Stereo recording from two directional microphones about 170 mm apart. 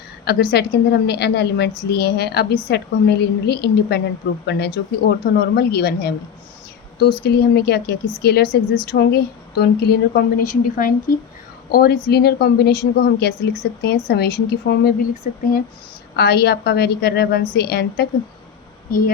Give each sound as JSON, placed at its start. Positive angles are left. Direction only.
{"t": 0.3, "sound": "a woman's voice", "side_deg": 75}
{"t": 16.1, "sound": "a woman's voice", "side_deg": 70}
{"t": 18.9, "sound": "speech", "side_deg": 60}